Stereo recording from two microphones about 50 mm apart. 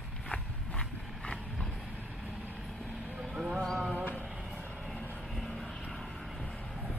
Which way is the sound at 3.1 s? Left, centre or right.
Centre.